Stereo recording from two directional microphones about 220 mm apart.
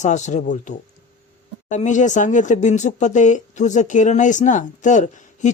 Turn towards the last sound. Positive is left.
turn(degrees=35)  # may be behind; listen again after turning